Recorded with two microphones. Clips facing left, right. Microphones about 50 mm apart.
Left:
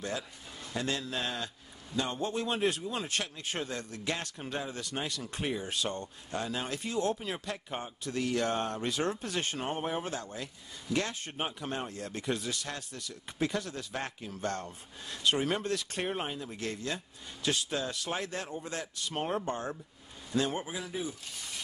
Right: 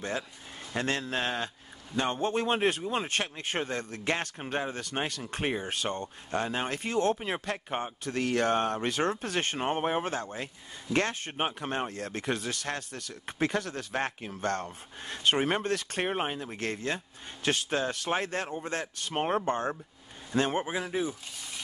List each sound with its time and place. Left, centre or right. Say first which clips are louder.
0.7 s speech: right 4 dB; right